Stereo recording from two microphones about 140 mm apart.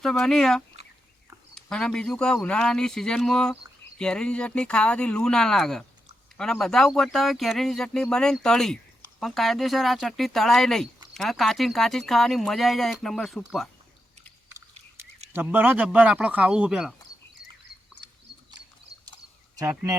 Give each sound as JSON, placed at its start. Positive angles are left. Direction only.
{"t": 0.0, "sound": "speech", "side_deg": 5}
{"t": 15.4, "sound": "speech", "side_deg": -15}
{"t": 19.5, "sound": "speech", "side_deg": -25}